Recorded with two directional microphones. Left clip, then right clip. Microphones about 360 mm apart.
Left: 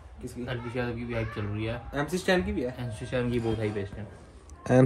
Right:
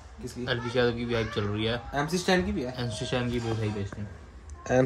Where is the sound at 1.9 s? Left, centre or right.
Centre.